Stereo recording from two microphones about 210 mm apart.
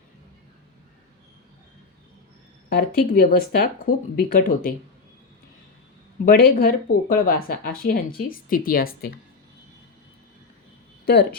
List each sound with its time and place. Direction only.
2.7 s speech: 45° left (ahead or behind)
6.2 s speech: 45° left (ahead or behind)
11.0 s speech: 50° left (ahead or behind)